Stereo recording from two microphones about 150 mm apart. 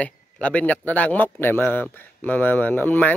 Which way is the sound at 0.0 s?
10° left (ahead or behind).